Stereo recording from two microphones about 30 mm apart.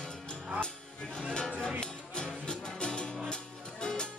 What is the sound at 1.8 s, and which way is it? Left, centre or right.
Music, left.